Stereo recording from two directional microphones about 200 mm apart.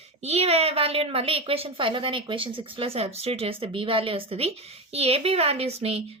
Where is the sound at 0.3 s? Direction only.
30° right (ahead or behind).